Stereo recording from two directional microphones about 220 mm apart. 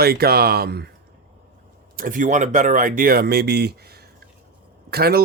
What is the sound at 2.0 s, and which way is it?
Speech, 35° right (ahead or behind).